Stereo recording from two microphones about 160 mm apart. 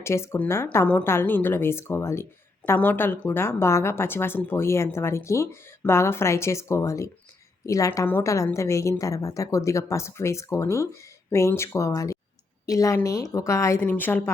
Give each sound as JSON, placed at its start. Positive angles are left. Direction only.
{"t": 0.0, "sound": "a woman's voice", "side_deg": 15}